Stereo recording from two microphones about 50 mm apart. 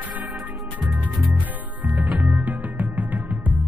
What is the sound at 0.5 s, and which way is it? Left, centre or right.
Music, centre.